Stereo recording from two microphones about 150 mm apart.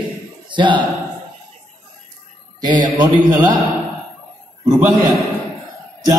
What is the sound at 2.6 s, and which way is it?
Speech, 30° right (ahead or behind).